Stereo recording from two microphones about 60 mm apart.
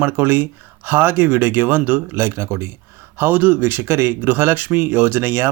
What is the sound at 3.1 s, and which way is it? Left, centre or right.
Speech, right.